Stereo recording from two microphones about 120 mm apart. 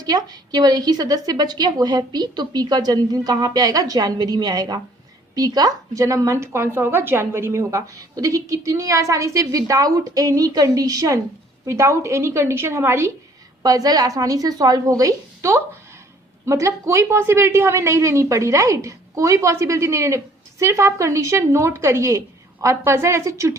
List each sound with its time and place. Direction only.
0.0 s a woman's voice: 30° right (ahead or behind)